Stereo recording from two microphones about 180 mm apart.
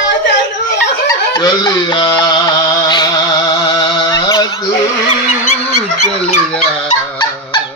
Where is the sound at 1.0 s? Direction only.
20° left (ahead or behind).